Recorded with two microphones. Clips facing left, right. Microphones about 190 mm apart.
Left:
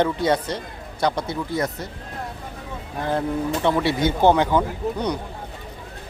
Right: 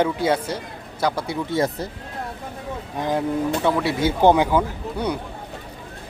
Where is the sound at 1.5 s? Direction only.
30° right (ahead or behind).